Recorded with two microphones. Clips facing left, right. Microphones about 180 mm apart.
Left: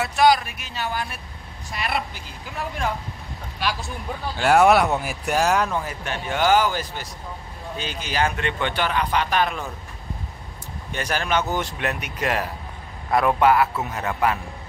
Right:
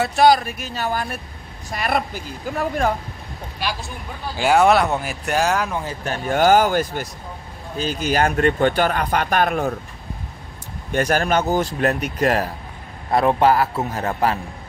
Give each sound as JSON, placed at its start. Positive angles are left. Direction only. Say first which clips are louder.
{"t": 0.0, "sound": "speech", "louder": "right 3 dB", "side_deg": -35}
{"t": 4.4, "sound": "speech", "louder": "right 1 dB", "side_deg": 0}
{"t": 6.0, "sound": "speech", "louder": "right 5 dB", "side_deg": -40}
{"t": 7.7, "sound": "speech", "louder": "right 7 dB", "side_deg": -40}
{"t": 10.9, "sound": "speech", "louder": "right 6 dB", "side_deg": -45}